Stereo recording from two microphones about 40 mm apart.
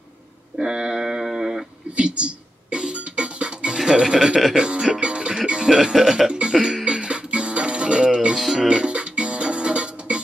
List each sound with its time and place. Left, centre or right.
0.6 s a sound: centre
2.0 s music: right
5.5 s speech: centre
6.3 s music: right
8.4 s music: centre
8.6 s music: right